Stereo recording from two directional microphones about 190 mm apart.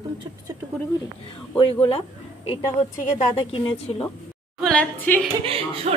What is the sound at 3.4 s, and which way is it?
Speech, 30° left (ahead or behind).